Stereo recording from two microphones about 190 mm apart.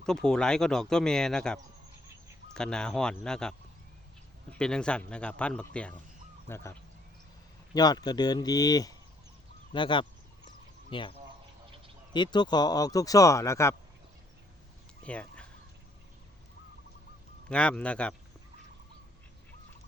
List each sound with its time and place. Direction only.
0.0 s speech: 5° left (ahead or behind)
4.5 s speech: 5° left (ahead or behind); by 11.1 s 25° left (ahead or behind)
12.1 s speech: 25° left (ahead or behind)
15.0 s a sound: 5° left (ahead or behind)
17.5 s speech: 5° left (ahead or behind)